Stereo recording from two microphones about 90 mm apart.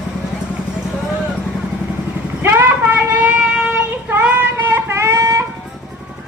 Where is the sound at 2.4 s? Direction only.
25° right (ahead or behind).